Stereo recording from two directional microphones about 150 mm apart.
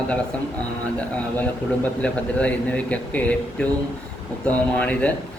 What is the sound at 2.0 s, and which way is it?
Speech, 10° left (ahead or behind).